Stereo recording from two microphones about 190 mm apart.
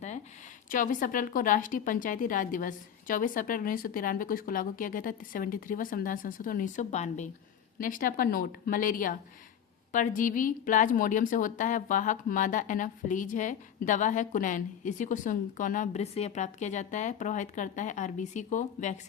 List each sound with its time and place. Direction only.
0.7 s a woman's voice: 45° left (ahead or behind)